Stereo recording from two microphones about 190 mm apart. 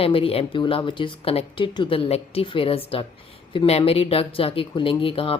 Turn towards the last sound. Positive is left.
turn(degrees=30)  # may be behind; listen again after turning